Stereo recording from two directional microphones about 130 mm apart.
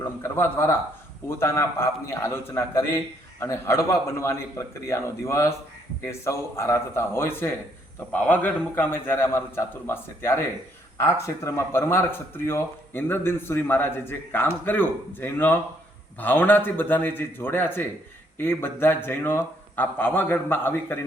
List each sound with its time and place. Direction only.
0.2 s a man's voice: 20° left (ahead or behind)